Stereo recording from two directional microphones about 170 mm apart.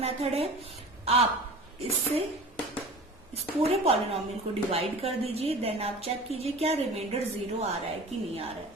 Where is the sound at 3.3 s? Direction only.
35° right (ahead or behind).